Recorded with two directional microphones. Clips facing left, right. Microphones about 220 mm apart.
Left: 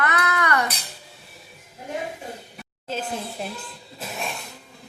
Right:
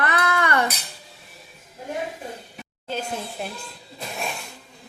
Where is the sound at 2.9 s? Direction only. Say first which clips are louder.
Even; centre (ahead or behind).